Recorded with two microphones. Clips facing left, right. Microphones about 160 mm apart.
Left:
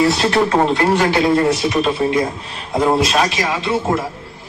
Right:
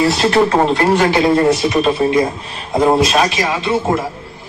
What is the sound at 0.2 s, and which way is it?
Speech, 5° right (ahead or behind).